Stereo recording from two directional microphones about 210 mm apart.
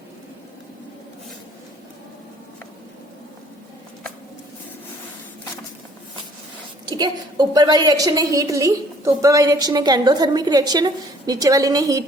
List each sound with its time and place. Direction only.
6.8 s a woman's voice: 20° right (ahead or behind)